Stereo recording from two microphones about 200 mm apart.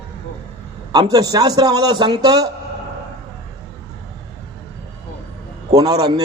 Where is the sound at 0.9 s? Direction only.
20° right (ahead or behind).